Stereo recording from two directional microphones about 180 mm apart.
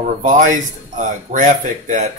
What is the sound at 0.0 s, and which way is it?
Speech, 45° right (ahead or behind).